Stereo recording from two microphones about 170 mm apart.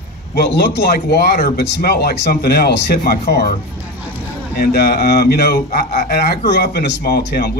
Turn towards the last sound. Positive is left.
turn(degrees=70)  # may be behind; listen again after turning